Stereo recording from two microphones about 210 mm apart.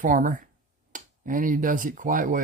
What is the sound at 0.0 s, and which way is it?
Speech, 40° right (ahead or behind).